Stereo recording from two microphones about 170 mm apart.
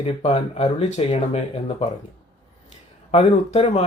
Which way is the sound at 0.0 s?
35° left (ahead or behind).